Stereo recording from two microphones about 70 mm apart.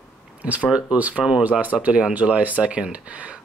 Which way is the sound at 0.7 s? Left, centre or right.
Centre.